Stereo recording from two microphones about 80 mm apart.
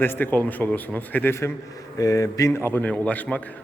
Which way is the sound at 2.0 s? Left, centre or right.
Left.